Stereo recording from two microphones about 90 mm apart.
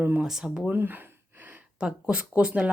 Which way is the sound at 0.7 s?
25° right (ahead or behind).